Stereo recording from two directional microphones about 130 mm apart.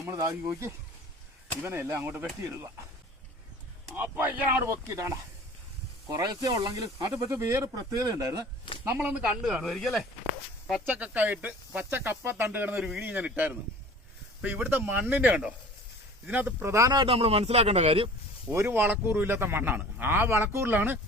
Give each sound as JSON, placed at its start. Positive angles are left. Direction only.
{"t": 0.0, "sound": "speech", "side_deg": -25}
{"t": 3.9, "sound": "a man's voice", "side_deg": -15}
{"t": 6.1, "sound": "speech", "side_deg": -30}
{"t": 8.8, "sound": "speech", "side_deg": -15}
{"t": 10.8, "sound": "a man's voice", "side_deg": -10}
{"t": 16.7, "sound": "speech", "side_deg": -30}
{"t": 17.1, "sound": "a man's voice", "side_deg": -50}
{"t": 18.5, "sound": "a man's voice", "side_deg": -15}